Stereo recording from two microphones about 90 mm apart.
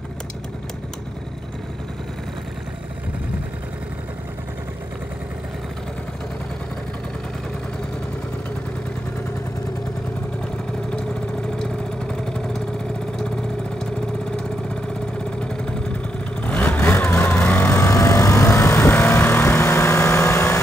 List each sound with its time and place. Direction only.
11.5 s vehicle: 5° left (ahead or behind)
15.4 s vehicle: 10° left (ahead or behind)
17.6 s vehicle: 35° left (ahead or behind)